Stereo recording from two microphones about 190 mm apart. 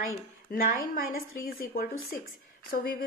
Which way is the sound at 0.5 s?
45° left (ahead or behind).